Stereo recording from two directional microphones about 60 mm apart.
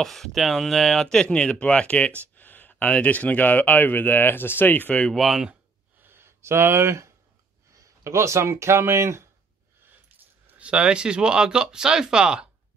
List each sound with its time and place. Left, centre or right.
0.0 s speech: centre; by 4.9 s left
5.1 s speech: centre
6.0 s speech: right
7.7 s speech: right
10.1 s keys jangling: right
10.6 s speech: centre